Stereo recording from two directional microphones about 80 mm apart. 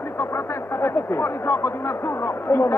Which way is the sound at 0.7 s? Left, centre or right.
Left.